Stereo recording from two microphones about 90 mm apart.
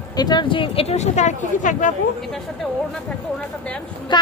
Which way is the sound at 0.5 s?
75° left (ahead or behind).